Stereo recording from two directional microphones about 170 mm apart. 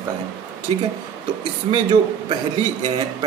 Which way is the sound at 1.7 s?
25° right (ahead or behind).